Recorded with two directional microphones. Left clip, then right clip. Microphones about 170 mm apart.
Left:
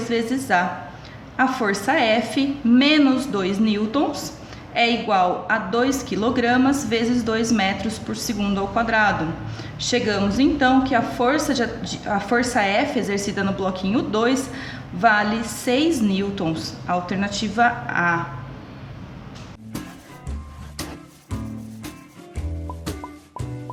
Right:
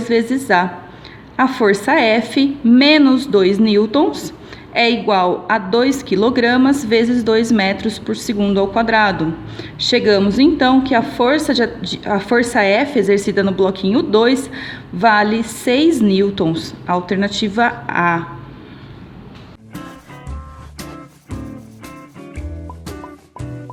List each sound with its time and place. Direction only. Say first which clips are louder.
0.0 s a woman's voice: right 7 dB; 50° right (ahead or behind)